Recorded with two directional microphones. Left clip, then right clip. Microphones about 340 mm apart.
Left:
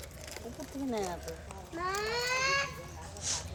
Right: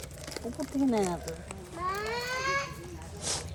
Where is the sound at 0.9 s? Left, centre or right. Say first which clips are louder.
Right 4 dB; right.